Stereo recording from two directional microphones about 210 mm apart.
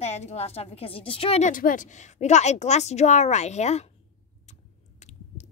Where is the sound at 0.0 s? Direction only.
30° left (ahead or behind).